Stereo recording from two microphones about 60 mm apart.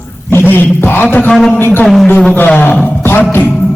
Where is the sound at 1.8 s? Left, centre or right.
Centre.